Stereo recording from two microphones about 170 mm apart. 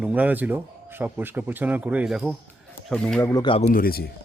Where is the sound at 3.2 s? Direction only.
20° left (ahead or behind).